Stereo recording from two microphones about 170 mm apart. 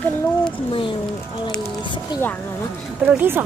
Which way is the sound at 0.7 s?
30° left (ahead or behind).